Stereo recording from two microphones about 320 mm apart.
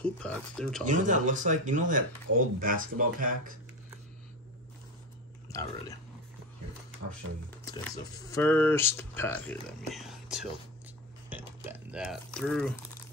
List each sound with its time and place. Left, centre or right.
0.0 s speech: centre
0.8 s speech: right
5.5 s speech: centre
7.7 s speech: centre
11.2 s a sound: centre